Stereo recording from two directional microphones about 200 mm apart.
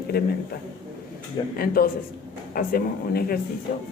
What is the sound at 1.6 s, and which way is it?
Speech, 45° left (ahead or behind).